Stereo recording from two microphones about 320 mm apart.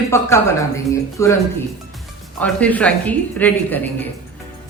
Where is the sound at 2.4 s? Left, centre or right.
Centre.